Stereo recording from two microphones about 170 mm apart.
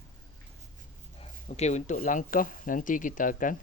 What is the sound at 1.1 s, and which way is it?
Speech, 40° left (ahead or behind).